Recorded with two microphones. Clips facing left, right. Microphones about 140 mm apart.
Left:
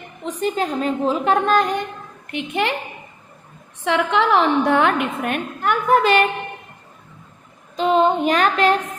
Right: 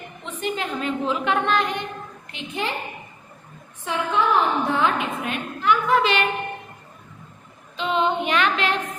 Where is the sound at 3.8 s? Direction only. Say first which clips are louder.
Left 4 dB; 80° left; by 6.2 s 45° left (ahead or behind).